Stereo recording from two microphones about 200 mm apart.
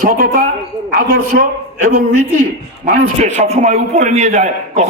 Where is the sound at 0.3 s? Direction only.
45° right (ahead or behind).